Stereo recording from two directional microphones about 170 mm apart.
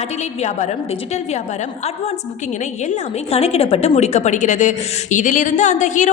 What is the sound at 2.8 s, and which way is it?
A woman's voice, 35° left (ahead or behind).